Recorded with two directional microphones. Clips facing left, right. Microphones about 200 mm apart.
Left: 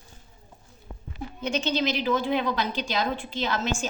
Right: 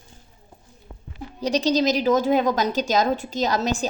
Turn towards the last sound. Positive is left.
turn(degrees=-40)  # may be behind; listen again after turning